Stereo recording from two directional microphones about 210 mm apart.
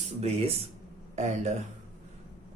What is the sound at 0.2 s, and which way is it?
Speech, 30° right (ahead or behind).